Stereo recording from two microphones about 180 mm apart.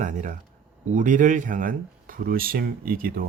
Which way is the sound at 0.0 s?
45° right (ahead or behind).